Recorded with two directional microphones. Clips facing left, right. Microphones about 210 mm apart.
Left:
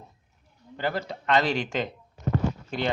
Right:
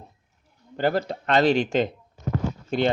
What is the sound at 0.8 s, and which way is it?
Speech, 45° right (ahead or behind).